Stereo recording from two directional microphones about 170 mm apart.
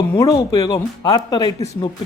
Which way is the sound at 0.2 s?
20° left (ahead or behind).